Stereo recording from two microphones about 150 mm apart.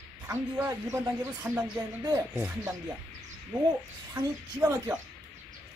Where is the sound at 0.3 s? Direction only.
15° right (ahead or behind).